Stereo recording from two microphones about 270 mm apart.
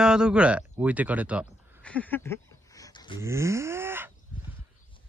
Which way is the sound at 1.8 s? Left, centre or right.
Centre.